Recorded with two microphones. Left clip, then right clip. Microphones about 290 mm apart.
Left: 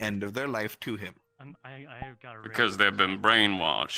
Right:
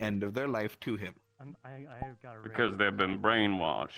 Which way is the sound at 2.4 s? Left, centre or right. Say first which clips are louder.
Left 5 dB; left.